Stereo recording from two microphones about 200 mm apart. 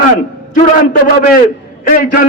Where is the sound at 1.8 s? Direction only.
45° left (ahead or behind).